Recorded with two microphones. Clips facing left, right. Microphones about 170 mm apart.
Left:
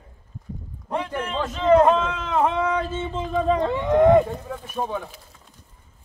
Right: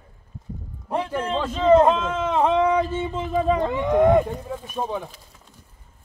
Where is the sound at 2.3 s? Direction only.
10° right (ahead or behind).